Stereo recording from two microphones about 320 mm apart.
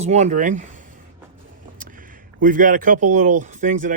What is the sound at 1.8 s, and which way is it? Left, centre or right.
Speech, right.